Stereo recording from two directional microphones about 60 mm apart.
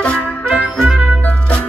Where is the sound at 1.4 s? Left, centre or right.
Centre.